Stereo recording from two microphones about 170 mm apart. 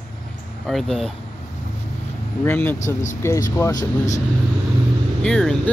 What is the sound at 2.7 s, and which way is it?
Speech, 45° left (ahead or behind).